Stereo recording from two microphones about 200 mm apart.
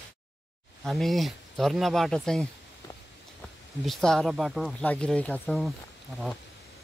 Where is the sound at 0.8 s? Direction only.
Centre (ahead or behind).